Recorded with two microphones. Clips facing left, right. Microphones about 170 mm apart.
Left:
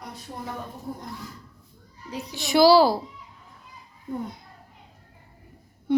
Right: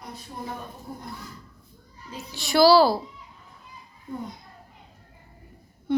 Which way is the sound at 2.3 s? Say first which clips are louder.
Even; 20° left (ahead or behind).